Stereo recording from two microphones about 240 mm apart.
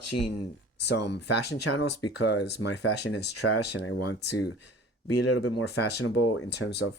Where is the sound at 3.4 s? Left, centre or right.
Left.